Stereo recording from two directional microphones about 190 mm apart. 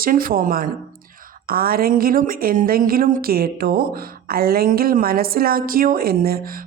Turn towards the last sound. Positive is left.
turn(degrees=-50)  # may be behind; listen again after turning